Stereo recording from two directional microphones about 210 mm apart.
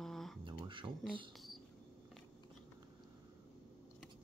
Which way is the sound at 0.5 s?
25° right (ahead or behind).